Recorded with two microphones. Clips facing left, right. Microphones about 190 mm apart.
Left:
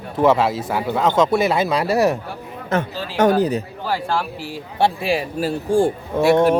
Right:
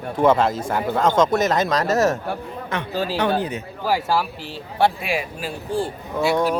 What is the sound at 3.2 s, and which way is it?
Speech, 40° left (ahead or behind).